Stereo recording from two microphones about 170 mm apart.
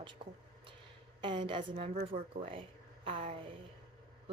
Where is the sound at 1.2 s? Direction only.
30° right (ahead or behind).